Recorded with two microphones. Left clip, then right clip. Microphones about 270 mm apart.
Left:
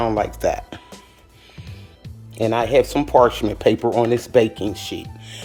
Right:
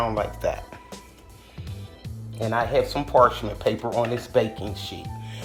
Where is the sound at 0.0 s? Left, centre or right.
Left.